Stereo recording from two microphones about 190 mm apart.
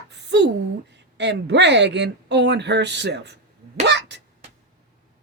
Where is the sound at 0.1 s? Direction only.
65° right (ahead or behind).